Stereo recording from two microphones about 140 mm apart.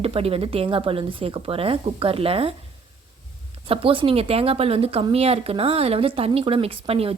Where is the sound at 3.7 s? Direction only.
40° right (ahead or behind).